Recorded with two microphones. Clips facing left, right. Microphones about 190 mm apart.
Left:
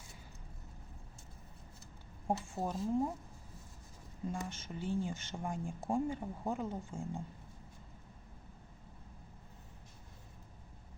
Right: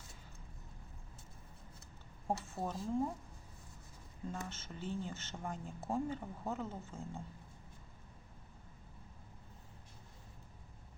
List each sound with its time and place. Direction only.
2.2 s speech: 10° left (ahead or behind)
4.3 s speech: 15° left (ahead or behind)